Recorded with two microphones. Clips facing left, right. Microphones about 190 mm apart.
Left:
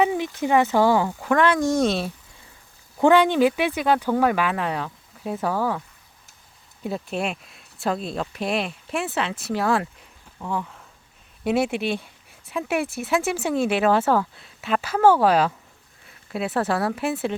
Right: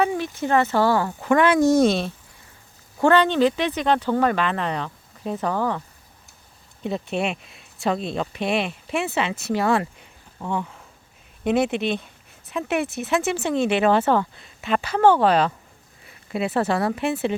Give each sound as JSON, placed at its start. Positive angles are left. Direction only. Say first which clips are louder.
{"t": 0.0, "sound": "a sound", "louder": "left 1 dB", "side_deg": 15}
{"t": 0.4, "sound": "speech", "louder": "left 1 dB", "side_deg": 15}
{"t": 1.2, "sound": "speech", "louder": "right 3 dB", "side_deg": -5}
{"t": 3.0, "sound": "speech", "louder": "left 1 dB", "side_deg": 15}
{"t": 6.8, "sound": "speech", "louder": "right 2 dB", "side_deg": 0}